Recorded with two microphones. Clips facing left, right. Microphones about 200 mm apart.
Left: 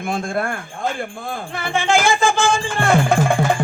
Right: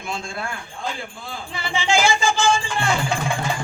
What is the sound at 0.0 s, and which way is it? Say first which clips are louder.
Music: left 8 dB; 55° left (ahead or behind).